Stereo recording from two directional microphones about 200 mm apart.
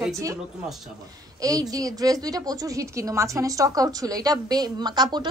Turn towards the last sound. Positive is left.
turn(degrees=-20)  # may be behind; listen again after turning